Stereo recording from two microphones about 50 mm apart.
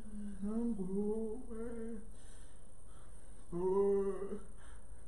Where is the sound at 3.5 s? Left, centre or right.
Centre.